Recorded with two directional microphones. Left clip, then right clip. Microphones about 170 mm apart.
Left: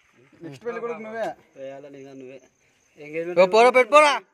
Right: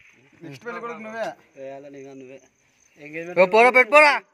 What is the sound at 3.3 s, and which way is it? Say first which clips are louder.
Speech: right 1 dB; centre (ahead or behind).